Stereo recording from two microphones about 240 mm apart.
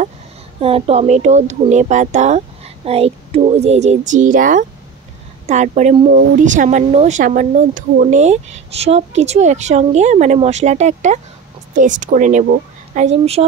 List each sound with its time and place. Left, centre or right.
0.6 s speech: right